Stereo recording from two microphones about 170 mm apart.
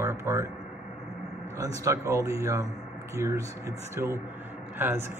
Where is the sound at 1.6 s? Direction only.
20° right (ahead or behind).